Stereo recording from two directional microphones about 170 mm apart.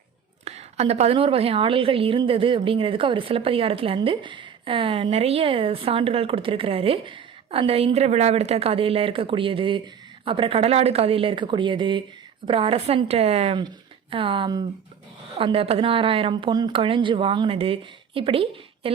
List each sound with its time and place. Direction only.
0.4 s a woman's voice: 40° right (ahead or behind)